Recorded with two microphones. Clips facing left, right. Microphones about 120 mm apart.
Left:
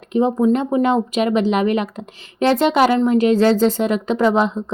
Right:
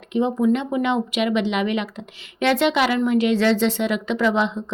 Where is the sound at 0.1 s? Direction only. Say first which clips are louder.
Left 3 dB; 40° left (ahead or behind).